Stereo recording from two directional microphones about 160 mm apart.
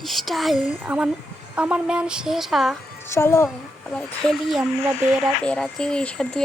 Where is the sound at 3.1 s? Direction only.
15° left (ahead or behind).